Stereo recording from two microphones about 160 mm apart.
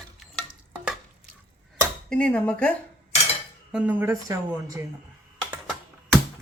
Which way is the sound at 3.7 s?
10° right (ahead or behind).